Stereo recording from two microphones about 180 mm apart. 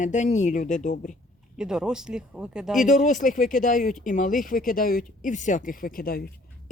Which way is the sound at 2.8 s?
45° left (ahead or behind).